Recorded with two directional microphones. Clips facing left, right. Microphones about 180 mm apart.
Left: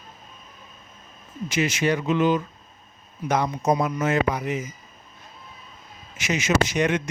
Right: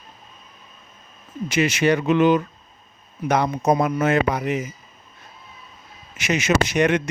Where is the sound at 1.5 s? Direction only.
70° right (ahead or behind).